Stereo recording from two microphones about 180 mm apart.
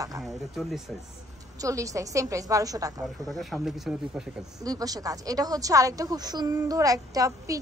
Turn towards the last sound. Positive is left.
turn(degrees=-20)  # may be behind; listen again after turning